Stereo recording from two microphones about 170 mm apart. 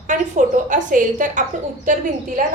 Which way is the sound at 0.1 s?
50° right (ahead or behind).